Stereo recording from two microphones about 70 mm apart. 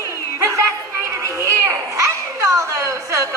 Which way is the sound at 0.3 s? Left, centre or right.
Right.